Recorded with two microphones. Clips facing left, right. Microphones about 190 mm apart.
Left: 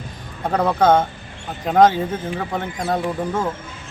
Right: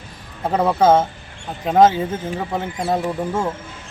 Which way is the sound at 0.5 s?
5° right (ahead or behind).